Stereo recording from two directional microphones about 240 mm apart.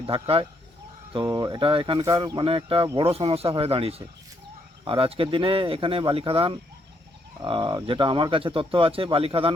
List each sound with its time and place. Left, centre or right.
0.0 s speech: right